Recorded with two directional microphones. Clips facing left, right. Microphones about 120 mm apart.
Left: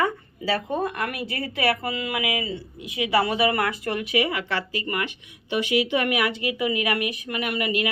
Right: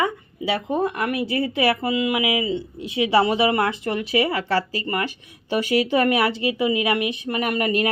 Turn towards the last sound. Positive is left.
turn(degrees=-45)  # may be behind; listen again after turning